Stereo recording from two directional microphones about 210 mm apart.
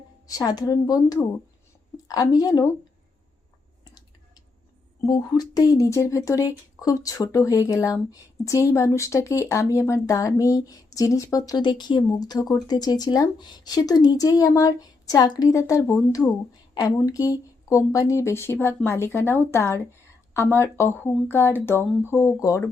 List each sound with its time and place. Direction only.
0.3 s speech: 15° left (ahead or behind)
5.0 s speech: 20° left (ahead or behind)